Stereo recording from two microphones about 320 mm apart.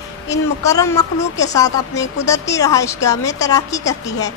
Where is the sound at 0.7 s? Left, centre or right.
Centre.